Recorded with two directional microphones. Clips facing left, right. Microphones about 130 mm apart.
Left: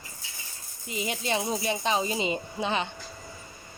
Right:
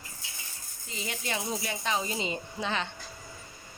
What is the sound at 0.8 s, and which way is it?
Speech, 15° left (ahead or behind).